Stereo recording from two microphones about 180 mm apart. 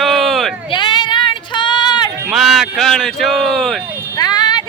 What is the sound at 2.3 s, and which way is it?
Male singing, centre (ahead or behind).